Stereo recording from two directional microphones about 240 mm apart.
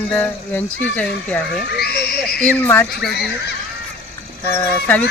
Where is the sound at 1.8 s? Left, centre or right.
Left.